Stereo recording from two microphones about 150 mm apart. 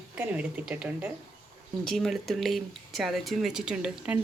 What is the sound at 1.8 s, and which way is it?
Speech, centre (ahead or behind).